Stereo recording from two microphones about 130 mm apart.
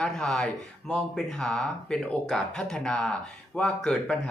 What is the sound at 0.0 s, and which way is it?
Speech, 5° left (ahead or behind).